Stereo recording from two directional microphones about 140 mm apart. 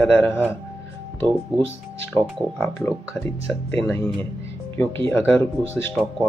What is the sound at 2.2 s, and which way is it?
Speech, 30° right (ahead or behind).